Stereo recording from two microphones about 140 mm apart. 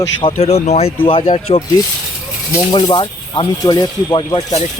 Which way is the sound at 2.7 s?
30° left (ahead or behind).